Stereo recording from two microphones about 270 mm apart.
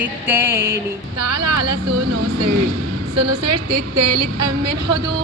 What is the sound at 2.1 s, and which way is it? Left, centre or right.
Speech, right.